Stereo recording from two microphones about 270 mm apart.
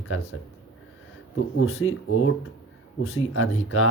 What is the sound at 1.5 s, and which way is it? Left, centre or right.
Speech, left.